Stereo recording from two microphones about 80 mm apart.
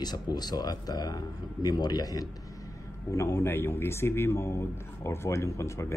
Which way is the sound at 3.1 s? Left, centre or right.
Left.